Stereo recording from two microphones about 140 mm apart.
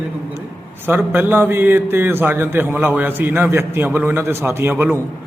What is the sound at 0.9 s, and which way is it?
A man's voice, 15° right (ahead or behind).